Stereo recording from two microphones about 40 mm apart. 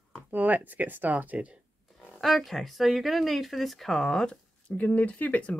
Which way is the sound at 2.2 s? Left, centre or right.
Centre.